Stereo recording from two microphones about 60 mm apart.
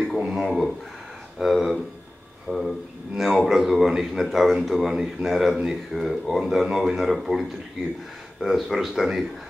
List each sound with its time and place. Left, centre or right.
0.2 s a man's voice: centre
2.5 s speech: right
3.2 s a man's voice: centre